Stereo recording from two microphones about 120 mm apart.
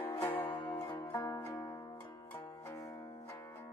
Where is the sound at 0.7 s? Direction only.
20° left (ahead or behind).